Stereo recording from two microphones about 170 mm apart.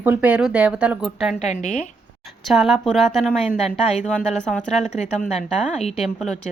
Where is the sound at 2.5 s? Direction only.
Centre (ahead or behind).